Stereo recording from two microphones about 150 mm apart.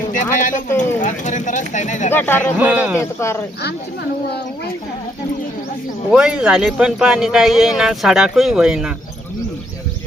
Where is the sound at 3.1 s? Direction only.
20° left (ahead or behind).